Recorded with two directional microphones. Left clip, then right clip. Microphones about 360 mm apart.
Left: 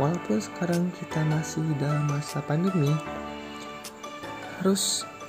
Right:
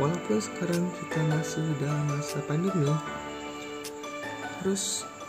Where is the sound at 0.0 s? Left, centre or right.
Centre.